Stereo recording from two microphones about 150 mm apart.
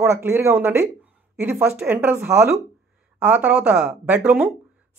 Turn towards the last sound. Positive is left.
turn(degrees=-10)  # may be behind; listen again after turning